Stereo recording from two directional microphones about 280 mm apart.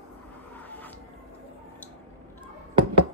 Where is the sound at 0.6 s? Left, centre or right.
Centre.